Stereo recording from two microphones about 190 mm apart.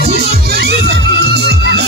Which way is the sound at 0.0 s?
55° right (ahead or behind).